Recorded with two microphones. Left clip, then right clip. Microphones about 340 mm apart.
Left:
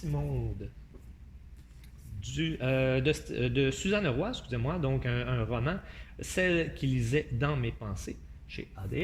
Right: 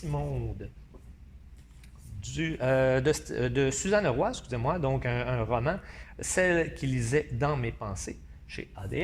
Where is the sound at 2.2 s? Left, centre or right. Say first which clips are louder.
Right 4 dB; centre.